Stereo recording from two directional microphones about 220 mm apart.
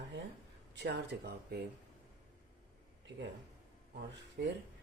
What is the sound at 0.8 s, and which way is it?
Speech, 50° right (ahead or behind).